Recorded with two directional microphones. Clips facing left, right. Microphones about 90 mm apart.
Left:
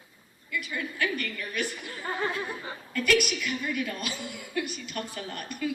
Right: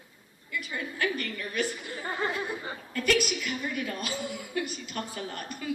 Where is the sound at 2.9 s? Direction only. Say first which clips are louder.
Left 1 dB; 35° right (ahead or behind).